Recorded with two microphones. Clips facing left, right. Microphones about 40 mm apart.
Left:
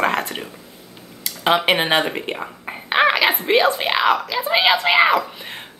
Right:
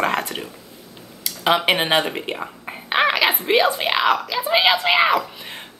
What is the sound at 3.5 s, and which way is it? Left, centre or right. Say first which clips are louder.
Speech: left 1 dB; centre.